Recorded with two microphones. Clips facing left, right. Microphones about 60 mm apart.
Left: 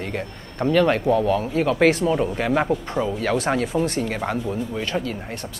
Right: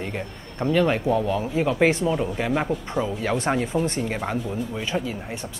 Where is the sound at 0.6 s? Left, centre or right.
Centre.